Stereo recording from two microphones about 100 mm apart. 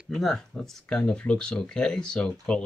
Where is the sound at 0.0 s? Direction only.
Centre (ahead or behind).